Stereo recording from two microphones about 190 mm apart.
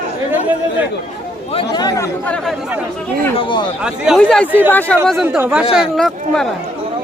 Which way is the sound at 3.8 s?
Centre (ahead or behind).